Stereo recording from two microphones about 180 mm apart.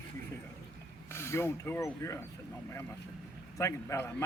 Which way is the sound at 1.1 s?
15° left (ahead or behind).